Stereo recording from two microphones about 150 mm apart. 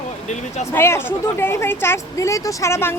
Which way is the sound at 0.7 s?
15° left (ahead or behind).